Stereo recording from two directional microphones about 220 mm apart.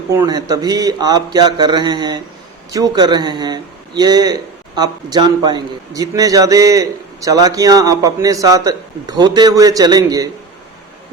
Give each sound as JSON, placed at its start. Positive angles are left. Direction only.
{"t": 0.1, "sound": "speech", "side_deg": -15}